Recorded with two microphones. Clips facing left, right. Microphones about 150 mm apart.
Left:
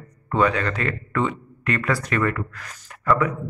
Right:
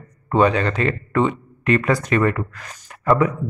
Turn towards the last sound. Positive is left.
turn(degrees=-25)  # may be behind; listen again after turning